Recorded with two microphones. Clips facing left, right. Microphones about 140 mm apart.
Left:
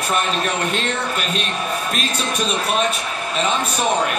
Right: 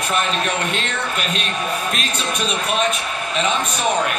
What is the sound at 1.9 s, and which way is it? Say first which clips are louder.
Speech: left 1 dB; 40° left (ahead or behind).